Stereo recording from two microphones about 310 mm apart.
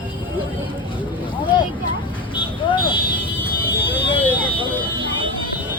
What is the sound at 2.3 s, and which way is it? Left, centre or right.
Vehicle, centre.